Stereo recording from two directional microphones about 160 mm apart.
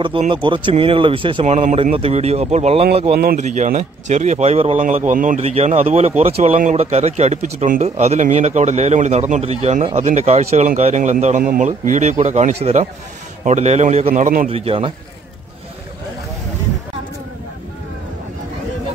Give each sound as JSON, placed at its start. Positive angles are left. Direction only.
{"t": 0.3, "sound": "speech", "side_deg": -30}
{"t": 4.7, "sound": "speech", "side_deg": -50}
{"t": 5.4, "sound": "speech", "side_deg": -40}
{"t": 14.5, "sound": "speech", "side_deg": -35}